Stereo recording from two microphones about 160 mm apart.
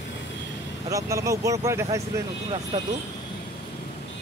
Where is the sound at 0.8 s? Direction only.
20° right (ahead or behind).